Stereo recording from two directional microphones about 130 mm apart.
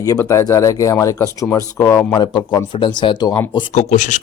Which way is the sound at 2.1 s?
35° left (ahead or behind).